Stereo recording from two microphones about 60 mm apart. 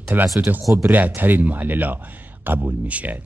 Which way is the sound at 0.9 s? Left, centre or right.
Right.